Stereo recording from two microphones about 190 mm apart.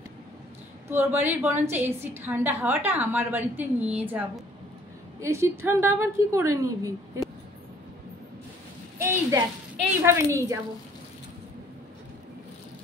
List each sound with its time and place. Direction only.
0.8 s a woman's voice: 10° right (ahead or behind)
5.2 s a woman's voice: 15° right (ahead or behind)
8.9 s a sound: 15° right (ahead or behind)
10.0 s a woman's voice: 15° right (ahead or behind)